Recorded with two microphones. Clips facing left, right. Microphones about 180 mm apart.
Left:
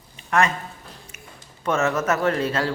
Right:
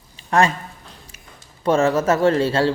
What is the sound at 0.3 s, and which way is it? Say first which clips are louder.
Speech: right 3 dB; 30° right (ahead or behind).